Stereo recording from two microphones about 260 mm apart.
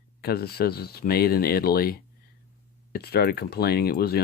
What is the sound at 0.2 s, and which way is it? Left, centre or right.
Speech, left.